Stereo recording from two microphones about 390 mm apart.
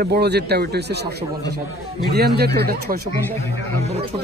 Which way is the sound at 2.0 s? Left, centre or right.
Right.